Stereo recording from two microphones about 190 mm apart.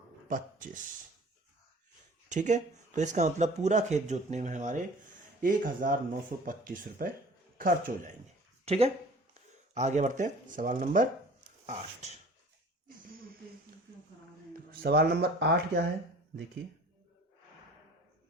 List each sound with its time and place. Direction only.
0.3 s speech: 45° right (ahead or behind)
2.3 s speech: 40° right (ahead or behind)
8.6 s speech: 30° right (ahead or behind)
14.7 s speech: 55° right (ahead or behind)